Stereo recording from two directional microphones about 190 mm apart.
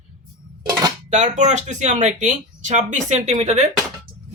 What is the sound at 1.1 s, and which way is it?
Speech, 40° right (ahead or behind).